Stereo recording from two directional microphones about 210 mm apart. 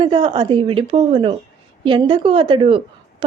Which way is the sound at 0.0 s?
25° right (ahead or behind).